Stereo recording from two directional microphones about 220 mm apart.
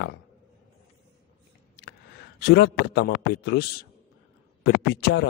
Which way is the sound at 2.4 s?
50° left (ahead or behind).